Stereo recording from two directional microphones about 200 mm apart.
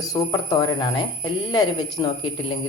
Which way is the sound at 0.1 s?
20° left (ahead or behind).